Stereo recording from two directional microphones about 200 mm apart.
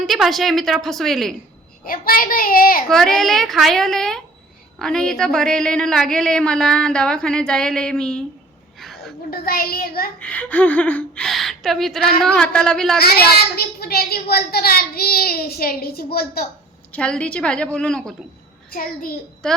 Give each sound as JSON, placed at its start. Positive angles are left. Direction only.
{"t": 0.0, "sound": "a woman's voice", "side_deg": 0}
{"t": 1.8, "sound": "a child's voice", "side_deg": 45}
{"t": 2.9, "sound": "a woman's voice", "side_deg": 0}
{"t": 8.8, "sound": "a sound", "side_deg": 0}
{"t": 9.3, "sound": "a child's voice", "side_deg": 45}
{"t": 10.2, "sound": "a woman's voice", "side_deg": 5}
{"t": 13.6, "sound": "a child's voice", "side_deg": 50}
{"t": 16.9, "sound": "a woman's voice", "side_deg": 5}
{"t": 19.4, "sound": "a woman's voice", "side_deg": 5}